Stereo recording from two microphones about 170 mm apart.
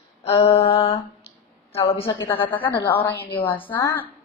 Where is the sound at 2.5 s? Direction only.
10° left (ahead or behind).